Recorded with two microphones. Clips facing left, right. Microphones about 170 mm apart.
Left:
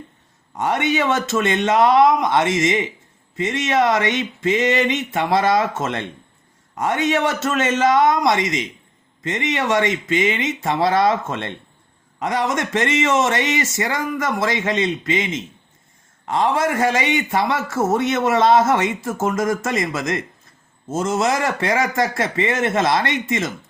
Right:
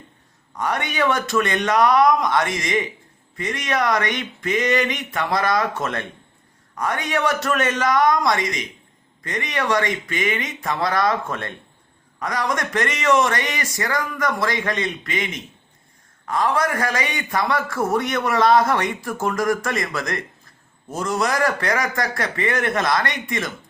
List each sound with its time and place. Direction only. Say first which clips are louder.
0.5 s a man's voice: left 5 dB; 25° left (ahead or behind)